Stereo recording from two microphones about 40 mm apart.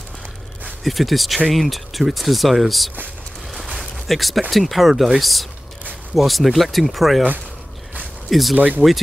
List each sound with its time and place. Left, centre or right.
0.8 s speech: centre
3.9 s a sound: centre
4.5 s speech: centre
8.3 s speech: centre
8.5 s speech: right